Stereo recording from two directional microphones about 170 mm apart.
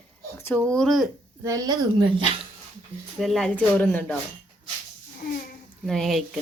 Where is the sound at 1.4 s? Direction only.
20° right (ahead or behind).